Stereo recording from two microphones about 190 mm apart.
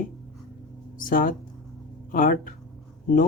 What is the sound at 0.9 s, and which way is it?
Speech, 45° left (ahead or behind).